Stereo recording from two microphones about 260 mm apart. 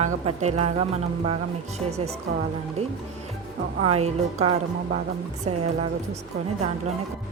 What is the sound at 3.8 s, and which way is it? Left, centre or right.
Speech, right.